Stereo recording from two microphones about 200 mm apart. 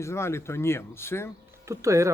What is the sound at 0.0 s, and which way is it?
Speech, 15° left (ahead or behind).